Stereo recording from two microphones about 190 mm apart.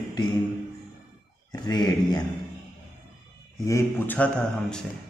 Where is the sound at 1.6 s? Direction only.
20° left (ahead or behind).